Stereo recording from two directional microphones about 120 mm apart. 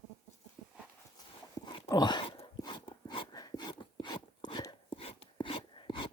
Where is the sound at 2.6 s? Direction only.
40° left (ahead or behind).